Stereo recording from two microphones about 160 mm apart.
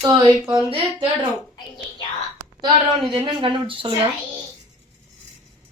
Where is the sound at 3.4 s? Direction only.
30° right (ahead or behind).